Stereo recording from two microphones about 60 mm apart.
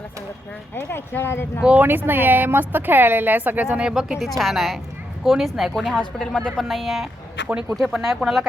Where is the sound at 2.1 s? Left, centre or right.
Right; by 4.2 s centre.